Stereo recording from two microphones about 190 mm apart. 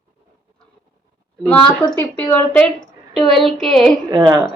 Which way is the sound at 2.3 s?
5° left (ahead or behind).